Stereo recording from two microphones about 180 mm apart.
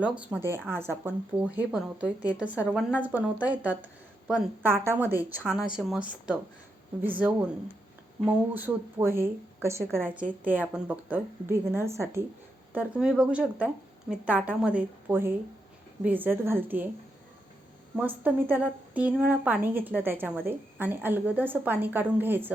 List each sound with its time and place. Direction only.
0.0 s speech: 5° right (ahead or behind)
18.2 s speech: 10° right (ahead or behind)